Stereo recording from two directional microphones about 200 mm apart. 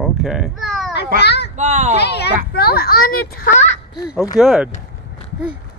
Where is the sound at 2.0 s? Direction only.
55° left (ahead or behind).